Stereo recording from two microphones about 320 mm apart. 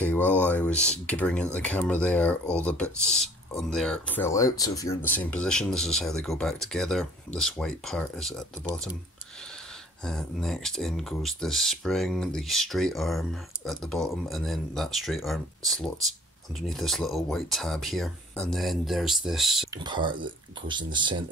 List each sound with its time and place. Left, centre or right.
0.0 s a sound: centre
0.5 s speech: centre
10.0 s speech: centre
19.8 s speech: centre